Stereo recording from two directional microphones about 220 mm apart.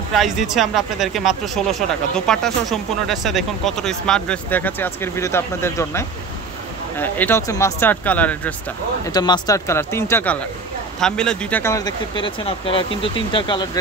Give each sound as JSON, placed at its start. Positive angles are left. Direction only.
{"t": 0.1, "sound": "speech", "side_deg": 0}
{"t": 9.0, "sound": "speech", "side_deg": 20}